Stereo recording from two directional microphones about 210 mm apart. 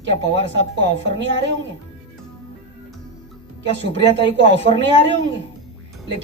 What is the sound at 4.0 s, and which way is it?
Speech, 60° right (ahead or behind).